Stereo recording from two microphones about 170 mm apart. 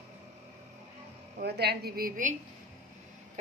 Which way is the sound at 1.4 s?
70° right (ahead or behind).